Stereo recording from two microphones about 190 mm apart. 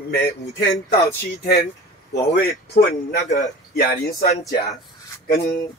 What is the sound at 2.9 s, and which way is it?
Speech, 55° left (ahead or behind).